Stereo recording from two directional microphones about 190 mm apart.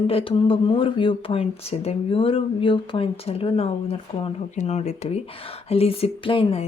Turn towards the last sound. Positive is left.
turn(degrees=30)  # may be behind; listen again after turning